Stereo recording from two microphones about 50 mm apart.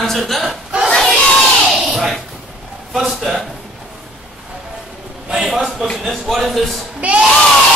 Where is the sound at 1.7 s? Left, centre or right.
Centre.